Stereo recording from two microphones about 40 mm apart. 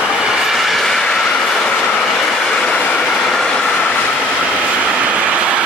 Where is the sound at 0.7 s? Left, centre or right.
Centre.